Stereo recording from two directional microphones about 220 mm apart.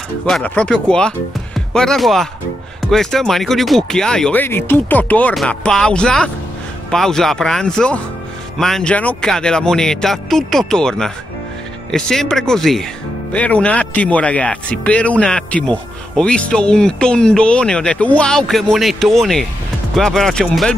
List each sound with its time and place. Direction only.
0.3 s speech: 5° left (ahead or behind)